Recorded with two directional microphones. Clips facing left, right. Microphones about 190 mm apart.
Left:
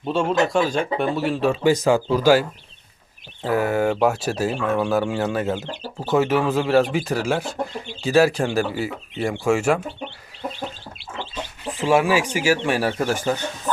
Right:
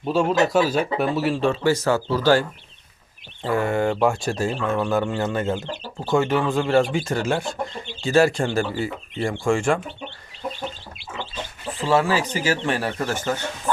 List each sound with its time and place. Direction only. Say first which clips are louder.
0.0 s speech: right 1 dB; centre (ahead or behind)
1.6 s speech: left 3 dB; 15° left (ahead or behind)
3.4 s speech: left 1 dB; 5° left (ahead or behind)
11.8 s speech: left 2 dB; 15° left (ahead or behind)